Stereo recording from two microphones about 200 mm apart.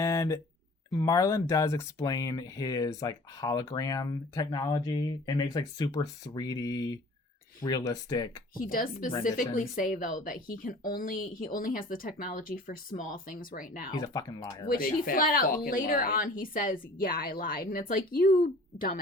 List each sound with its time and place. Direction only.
0.0 s a sound: 15° left (ahead or behind)
0.9 s speech: 15° left (ahead or behind)
8.5 s speech: 45° left (ahead or behind)
13.9 s speech: 20° left (ahead or behind)
14.7 s speech: 45° left (ahead or behind)